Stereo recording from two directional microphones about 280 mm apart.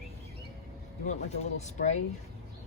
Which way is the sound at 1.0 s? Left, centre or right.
Left.